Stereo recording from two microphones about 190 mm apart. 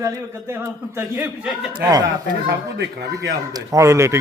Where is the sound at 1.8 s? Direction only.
20° right (ahead or behind).